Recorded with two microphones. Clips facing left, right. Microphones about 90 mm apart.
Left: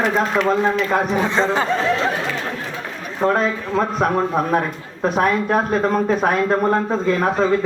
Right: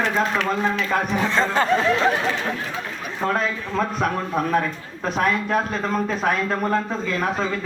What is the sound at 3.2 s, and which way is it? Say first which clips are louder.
A man's voice: left 5 dB; 25° left (ahead or behind).